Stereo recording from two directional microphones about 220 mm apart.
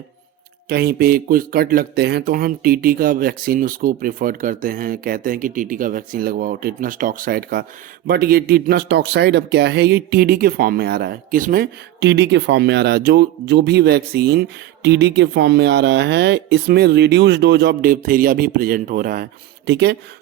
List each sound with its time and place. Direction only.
0.7 s speech: 45° right (ahead or behind)